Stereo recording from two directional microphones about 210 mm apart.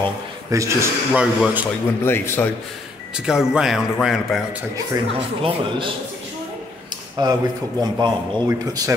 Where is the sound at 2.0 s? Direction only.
10° left (ahead or behind).